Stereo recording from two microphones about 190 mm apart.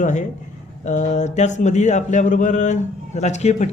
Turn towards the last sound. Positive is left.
turn(degrees=35)  # may be behind; listen again after turning